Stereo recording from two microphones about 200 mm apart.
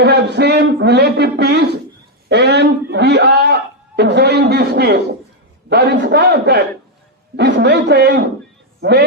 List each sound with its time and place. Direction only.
0.0 s a man's voice: 55° right (ahead or behind)
2.3 s a sound: 60° right (ahead or behind)
5.6 s a man's voice: 55° right (ahead or behind)